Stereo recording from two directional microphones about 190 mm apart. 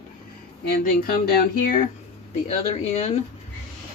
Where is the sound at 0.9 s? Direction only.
50° left (ahead or behind).